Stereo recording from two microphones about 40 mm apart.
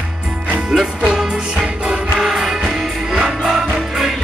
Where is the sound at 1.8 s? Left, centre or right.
Right.